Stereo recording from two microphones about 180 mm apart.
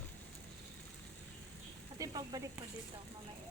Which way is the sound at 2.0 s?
20° right (ahead or behind).